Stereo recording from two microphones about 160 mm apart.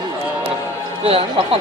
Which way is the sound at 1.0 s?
35° right (ahead or behind).